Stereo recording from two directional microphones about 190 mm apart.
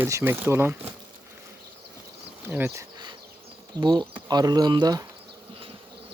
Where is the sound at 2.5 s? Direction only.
10° right (ahead or behind).